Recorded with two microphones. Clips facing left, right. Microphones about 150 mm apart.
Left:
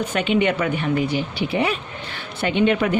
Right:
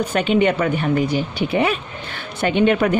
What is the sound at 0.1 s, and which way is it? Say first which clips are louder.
Speech: right 2 dB; 40° right (ahead or behind).